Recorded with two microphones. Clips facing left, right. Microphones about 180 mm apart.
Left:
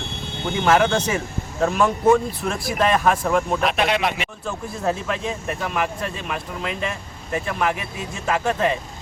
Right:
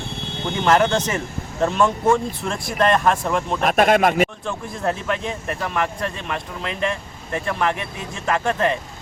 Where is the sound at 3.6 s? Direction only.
45° right (ahead or behind).